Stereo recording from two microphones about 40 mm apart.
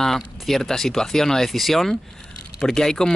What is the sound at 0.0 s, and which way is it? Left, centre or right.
Speech, centre.